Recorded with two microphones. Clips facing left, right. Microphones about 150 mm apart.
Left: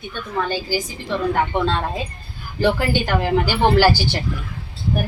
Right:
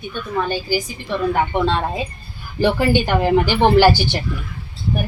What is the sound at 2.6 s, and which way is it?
Speech, 15° right (ahead or behind).